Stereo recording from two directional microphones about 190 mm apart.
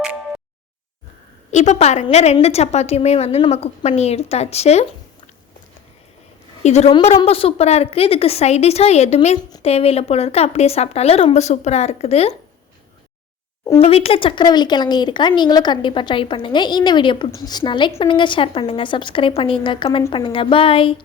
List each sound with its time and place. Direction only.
1.5 s a woman's voice: 40° left (ahead or behind)
6.6 s a woman's voice: 35° left (ahead or behind)
13.7 s speech: 30° left (ahead or behind)